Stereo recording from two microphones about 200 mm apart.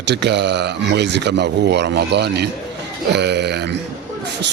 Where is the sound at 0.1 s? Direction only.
60° right (ahead or behind).